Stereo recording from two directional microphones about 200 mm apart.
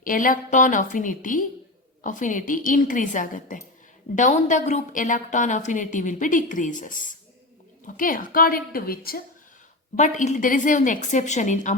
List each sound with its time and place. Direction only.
0.0 s a woman's voice: 45° left (ahead or behind)
10.0 s a woman's voice: 40° left (ahead or behind)